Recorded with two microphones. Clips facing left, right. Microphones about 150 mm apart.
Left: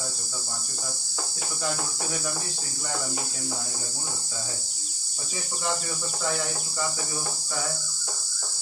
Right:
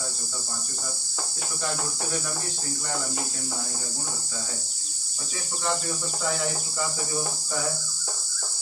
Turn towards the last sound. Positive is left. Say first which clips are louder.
# right 1 dB
turn(degrees=0)  # may be behind; listen again after turning